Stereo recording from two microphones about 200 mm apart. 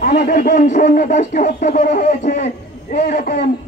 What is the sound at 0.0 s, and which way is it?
Speech, 40° left (ahead or behind).